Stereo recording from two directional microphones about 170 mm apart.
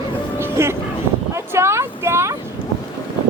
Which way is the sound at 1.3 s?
15° right (ahead or behind).